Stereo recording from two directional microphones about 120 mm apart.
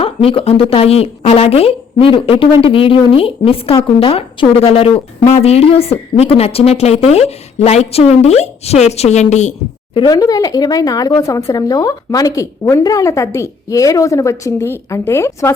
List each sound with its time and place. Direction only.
0.0 s a woman's voice: 50° left (ahead or behind); by 9.2 s 65° left (ahead or behind)
9.3 s a woman's voice: 75° left (ahead or behind)
10.1 s a woman's voice: 30° left (ahead or behind)